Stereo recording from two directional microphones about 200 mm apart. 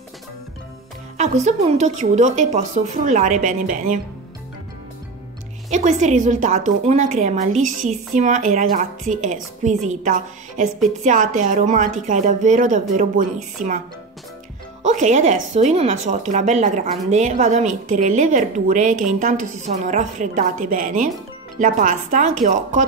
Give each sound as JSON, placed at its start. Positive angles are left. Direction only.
{"t": 1.1, "sound": "speech", "side_deg": -35}
{"t": 5.7, "sound": "speech", "side_deg": -35}
{"t": 14.8, "sound": "speech", "side_deg": -35}